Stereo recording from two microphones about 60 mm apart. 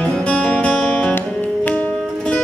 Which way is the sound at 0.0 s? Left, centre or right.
Centre.